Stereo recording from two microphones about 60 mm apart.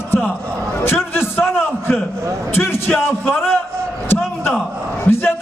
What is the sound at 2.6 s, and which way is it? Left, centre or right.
A man's voice, left.